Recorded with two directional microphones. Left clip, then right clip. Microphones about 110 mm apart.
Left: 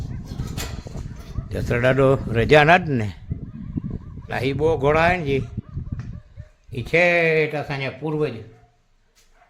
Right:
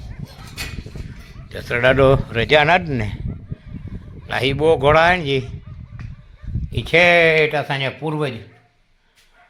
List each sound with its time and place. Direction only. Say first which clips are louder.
1.5 s speech: right 2 dB; 35° left (ahead or behind)
1.8 s speech: right 4 dB; 25° left (ahead or behind)
2.5 s speech: even; 50° left (ahead or behind)
4.3 s speech: right 5 dB; 5° left (ahead or behind)
6.7 s speech: right 5 dB; centre (ahead or behind)